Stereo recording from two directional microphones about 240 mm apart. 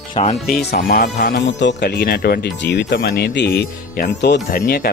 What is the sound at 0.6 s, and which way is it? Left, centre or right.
Speech, left.